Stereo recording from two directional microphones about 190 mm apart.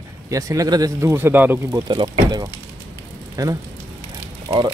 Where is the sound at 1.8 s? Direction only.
25° right (ahead or behind).